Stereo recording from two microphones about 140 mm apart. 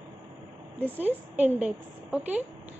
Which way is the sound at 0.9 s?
10° right (ahead or behind).